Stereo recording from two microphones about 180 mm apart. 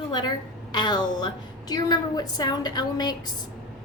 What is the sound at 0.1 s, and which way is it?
A woman's voice, 25° left (ahead or behind).